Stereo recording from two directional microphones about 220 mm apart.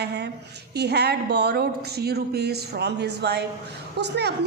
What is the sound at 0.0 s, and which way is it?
A woman's voice, 50° right (ahead or behind).